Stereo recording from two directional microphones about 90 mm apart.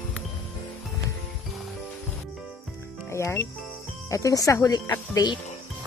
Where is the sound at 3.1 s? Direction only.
30° left (ahead or behind); by 5.4 s 50° left (ahead or behind).